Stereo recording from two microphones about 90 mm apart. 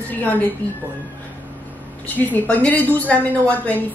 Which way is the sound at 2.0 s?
20° left (ahead or behind).